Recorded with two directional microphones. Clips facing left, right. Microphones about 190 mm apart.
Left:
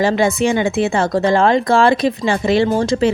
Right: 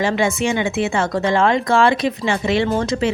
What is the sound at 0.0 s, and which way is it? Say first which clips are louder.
Speech: left 4 dB; 35° left (ahead or behind).